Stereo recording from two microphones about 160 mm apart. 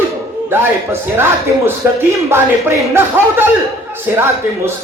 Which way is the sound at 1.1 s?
15° right (ahead or behind).